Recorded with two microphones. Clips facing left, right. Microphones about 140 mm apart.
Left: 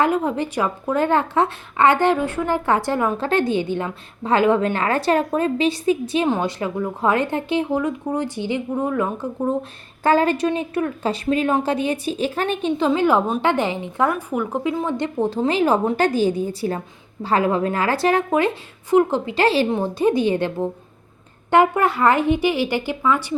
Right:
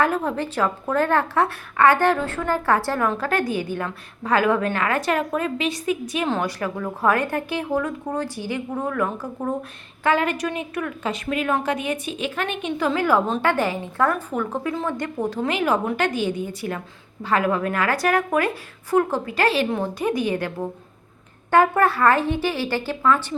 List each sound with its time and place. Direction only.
0.0 s a woman's voice: 20° left (ahead or behind)
10.0 s a woman's voice: 35° left (ahead or behind)
21.5 s a woman's voice: 20° left (ahead or behind)